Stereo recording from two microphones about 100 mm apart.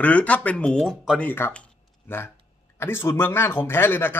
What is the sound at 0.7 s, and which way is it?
Speech, centre (ahead or behind).